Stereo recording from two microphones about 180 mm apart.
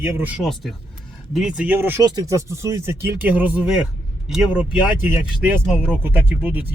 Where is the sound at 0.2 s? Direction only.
5° right (ahead or behind).